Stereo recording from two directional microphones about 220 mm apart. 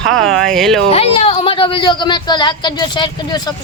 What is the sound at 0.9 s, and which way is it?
Speech, 25° left (ahead or behind).